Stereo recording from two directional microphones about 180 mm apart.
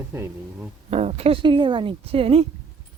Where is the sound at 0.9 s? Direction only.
35° right (ahead or behind).